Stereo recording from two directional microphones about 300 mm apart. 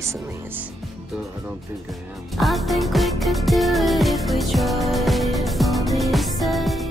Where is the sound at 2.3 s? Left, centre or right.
Centre.